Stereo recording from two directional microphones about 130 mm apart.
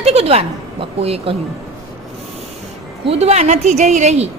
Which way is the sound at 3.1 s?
50° right (ahead or behind).